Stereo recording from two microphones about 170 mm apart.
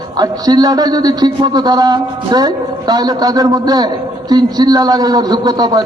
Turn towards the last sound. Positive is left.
turn(degrees=-25)  # may be behind; listen again after turning